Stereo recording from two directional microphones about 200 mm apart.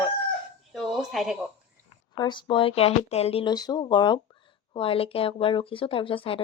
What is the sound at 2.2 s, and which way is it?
Speech, 20° left (ahead or behind).